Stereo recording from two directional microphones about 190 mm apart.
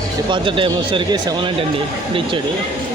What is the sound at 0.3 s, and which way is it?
Speech, 25° right (ahead or behind).